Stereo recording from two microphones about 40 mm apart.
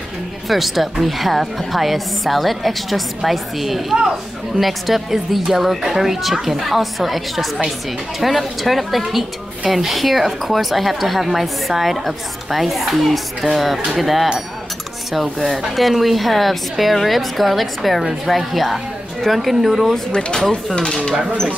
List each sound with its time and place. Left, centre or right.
0.5 s a woman's voice: centre
15.4 s a woman's voice: centre
20.1 s speech: left
20.3 s speech: centre
20.7 s speech: left